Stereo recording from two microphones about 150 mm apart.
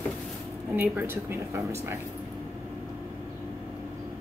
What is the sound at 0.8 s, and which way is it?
Speech, 15° right (ahead or behind).